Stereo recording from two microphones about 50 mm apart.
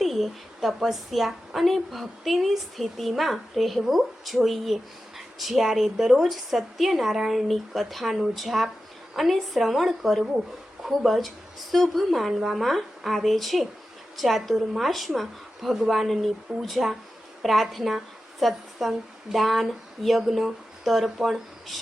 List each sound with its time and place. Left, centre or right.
0.0 s a woman's voice: centre